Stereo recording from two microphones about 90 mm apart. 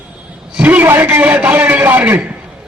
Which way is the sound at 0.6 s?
20° right (ahead or behind).